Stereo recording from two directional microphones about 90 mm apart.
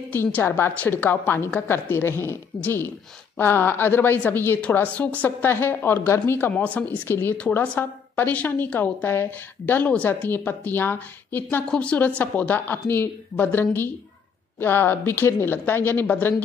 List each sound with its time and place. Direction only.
0.1 s a woman's voice: 25° left (ahead or behind)
7.1 s a woman's voice: 25° left (ahead or behind)